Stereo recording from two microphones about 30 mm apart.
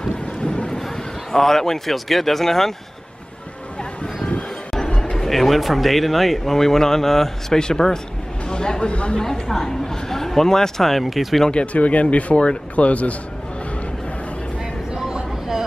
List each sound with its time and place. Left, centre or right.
0.7 s a sound: centre
2.0 s speech: centre
5.1 s speech: centre; by 8.9 s left
8.9 s a woman's voice: left
9.2 s speech: centre
11.6 s speech: left